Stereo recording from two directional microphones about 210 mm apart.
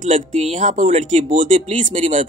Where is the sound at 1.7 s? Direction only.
25° right (ahead or behind).